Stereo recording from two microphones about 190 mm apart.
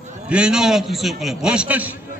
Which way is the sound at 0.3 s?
5° right (ahead or behind).